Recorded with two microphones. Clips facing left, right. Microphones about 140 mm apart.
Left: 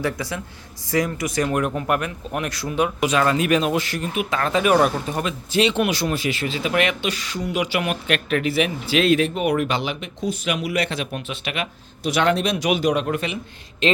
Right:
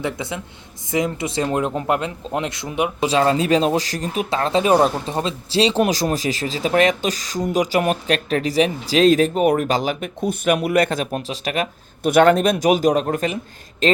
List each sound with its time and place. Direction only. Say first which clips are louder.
0.0 s speech: even; 20° right (ahead or behind); by 13.9 s 40° right (ahead or behind)